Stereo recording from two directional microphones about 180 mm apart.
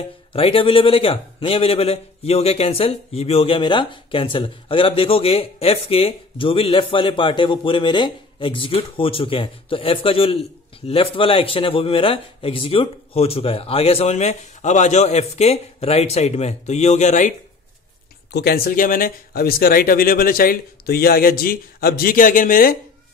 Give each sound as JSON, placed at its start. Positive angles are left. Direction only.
{"t": 0.3, "sound": "a man's voice", "side_deg": 30}
{"t": 18.3, "sound": "speech", "side_deg": 60}